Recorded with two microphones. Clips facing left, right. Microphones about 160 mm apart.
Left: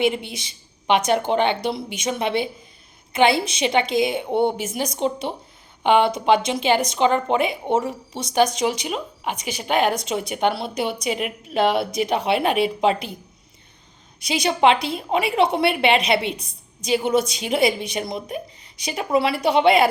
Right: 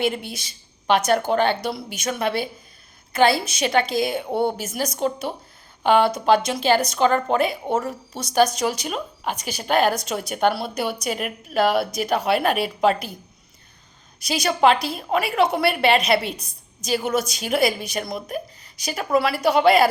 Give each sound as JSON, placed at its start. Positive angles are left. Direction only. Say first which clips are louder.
{"t": 0.0, "sound": "a woman's voice", "louder": "left 2 dB", "side_deg": 20}
{"t": 14.3, "sound": "a woman's voice", "louder": "even", "side_deg": 25}